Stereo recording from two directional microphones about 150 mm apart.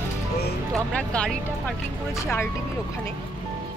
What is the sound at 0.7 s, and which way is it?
Speech, 5° left (ahead or behind).